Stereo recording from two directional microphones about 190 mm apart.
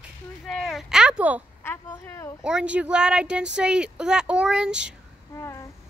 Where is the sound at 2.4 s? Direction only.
5° right (ahead or behind).